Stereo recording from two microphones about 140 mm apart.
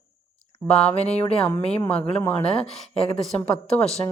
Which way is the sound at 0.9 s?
45° left (ahead or behind).